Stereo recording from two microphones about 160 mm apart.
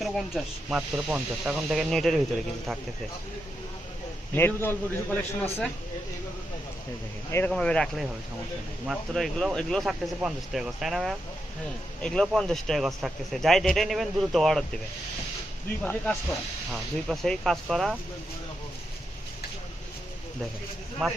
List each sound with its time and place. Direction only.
0.0 s a man's voice: centre (ahead or behind)
4.4 s a man's voice: 15° left (ahead or behind)
7.3 s a man's voice: 15° left (ahead or behind)
15.8 s a man's voice: 10° left (ahead or behind)